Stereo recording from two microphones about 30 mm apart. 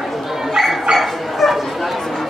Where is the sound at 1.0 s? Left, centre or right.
Centre.